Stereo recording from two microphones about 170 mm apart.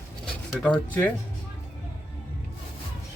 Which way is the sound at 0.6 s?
10° left (ahead or behind).